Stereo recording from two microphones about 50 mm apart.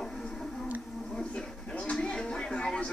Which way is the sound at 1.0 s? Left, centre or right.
Centre.